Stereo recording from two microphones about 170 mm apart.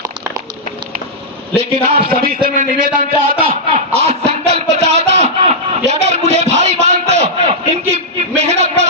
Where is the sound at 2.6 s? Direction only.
50° right (ahead or behind).